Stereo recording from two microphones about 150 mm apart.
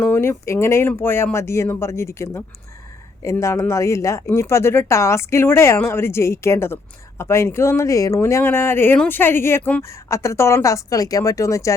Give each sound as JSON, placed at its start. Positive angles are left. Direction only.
{"t": 0.0, "sound": "speech", "side_deg": 15}